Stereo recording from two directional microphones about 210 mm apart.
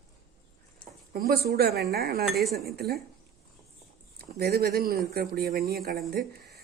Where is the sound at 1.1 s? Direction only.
50° right (ahead or behind).